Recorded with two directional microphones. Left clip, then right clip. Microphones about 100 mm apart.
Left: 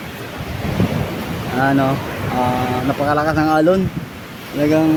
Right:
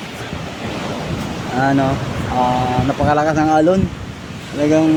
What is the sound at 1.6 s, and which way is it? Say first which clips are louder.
Speech: even; centre (ahead or behind).